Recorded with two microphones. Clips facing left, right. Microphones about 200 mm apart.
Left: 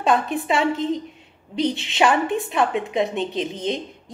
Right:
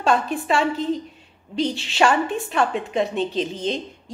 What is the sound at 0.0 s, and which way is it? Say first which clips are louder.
A woman's voice: even; 15° left (ahead or behind).